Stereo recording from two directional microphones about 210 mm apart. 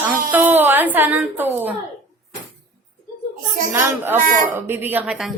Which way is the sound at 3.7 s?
10° right (ahead or behind).